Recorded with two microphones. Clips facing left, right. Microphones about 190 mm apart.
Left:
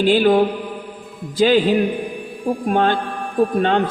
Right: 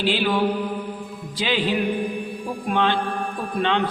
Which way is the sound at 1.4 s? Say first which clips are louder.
Left 8 dB; 45° left (ahead or behind).